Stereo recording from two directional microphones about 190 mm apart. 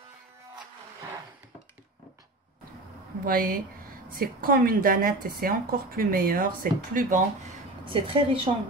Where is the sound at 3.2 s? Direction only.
50° right (ahead or behind).